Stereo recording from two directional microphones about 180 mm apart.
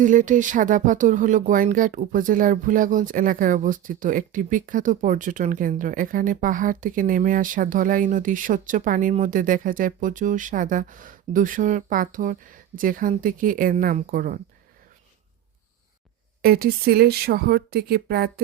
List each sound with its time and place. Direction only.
0.0 s speech: 45° right (ahead or behind)
16.4 s speech: 55° right (ahead or behind)